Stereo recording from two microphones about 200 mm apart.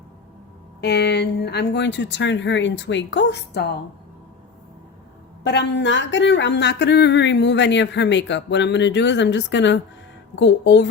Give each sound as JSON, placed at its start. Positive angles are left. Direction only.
{"t": 0.8, "sound": "speech", "side_deg": 55}
{"t": 5.4, "sound": "speech", "side_deg": 60}